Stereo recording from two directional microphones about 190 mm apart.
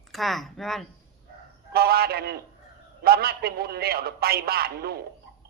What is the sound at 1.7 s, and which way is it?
A man's voice, 55° right (ahead or behind).